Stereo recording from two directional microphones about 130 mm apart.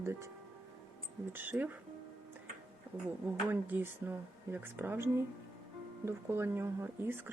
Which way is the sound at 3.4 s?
15° right (ahead or behind).